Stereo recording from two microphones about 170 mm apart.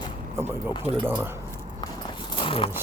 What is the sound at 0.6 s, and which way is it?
Speech, 30° left (ahead or behind).